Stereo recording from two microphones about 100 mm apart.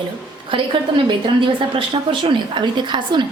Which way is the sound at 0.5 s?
60° right (ahead or behind).